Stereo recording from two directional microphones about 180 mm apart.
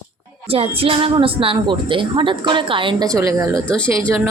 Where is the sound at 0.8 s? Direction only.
30° right (ahead or behind).